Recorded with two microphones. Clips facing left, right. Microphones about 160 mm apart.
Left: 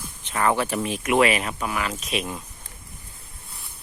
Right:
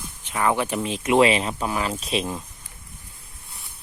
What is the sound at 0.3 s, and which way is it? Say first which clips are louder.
Speech: even; 10° right (ahead or behind).